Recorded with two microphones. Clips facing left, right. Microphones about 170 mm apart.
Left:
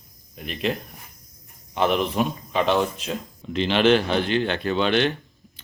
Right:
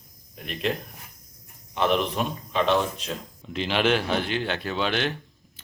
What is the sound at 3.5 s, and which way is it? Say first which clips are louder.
Speech: left 5 dB; 5° right (ahead or behind).